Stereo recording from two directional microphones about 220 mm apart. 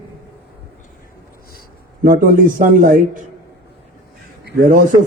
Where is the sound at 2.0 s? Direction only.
40° right (ahead or behind).